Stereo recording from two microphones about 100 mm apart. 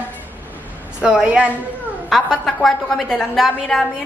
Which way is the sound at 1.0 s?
10° right (ahead or behind).